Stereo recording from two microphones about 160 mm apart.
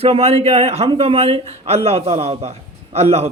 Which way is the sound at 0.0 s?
40° right (ahead or behind).